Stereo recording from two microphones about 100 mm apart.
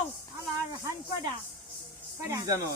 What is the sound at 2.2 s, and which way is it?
Speech, 35° right (ahead or behind).